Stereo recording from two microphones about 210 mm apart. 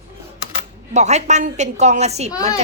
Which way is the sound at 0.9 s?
35° right (ahead or behind).